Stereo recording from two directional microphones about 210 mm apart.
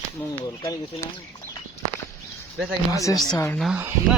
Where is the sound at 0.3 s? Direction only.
15° left (ahead or behind).